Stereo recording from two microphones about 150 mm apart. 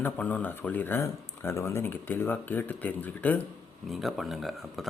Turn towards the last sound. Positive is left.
turn(degrees=0)  # may be behind; listen again after turning